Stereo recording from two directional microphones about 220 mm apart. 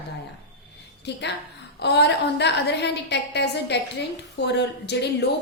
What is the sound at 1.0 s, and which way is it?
A woman's voice, 50° left (ahead or behind).